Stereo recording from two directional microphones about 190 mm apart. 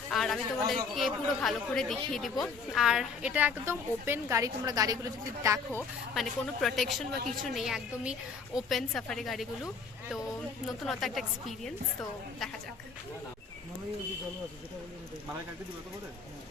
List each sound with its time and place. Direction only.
0.1 s a woman's voice: centre (ahead or behind); by 5.6 s 15° right (ahead or behind)
6.1 s speech: centre (ahead or behind)
10.8 s speech: centre (ahead or behind)